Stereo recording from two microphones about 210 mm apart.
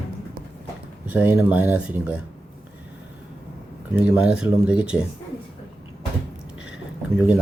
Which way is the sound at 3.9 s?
5° right (ahead or behind).